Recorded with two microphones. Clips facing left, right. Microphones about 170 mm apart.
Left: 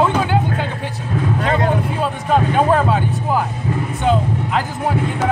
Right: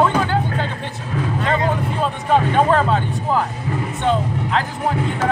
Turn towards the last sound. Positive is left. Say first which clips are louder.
# left 1 dB
turn(degrees=5)  # may be behind; listen again after turning